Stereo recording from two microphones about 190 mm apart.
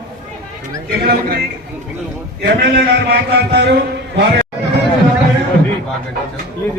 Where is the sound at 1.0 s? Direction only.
50° right (ahead or behind).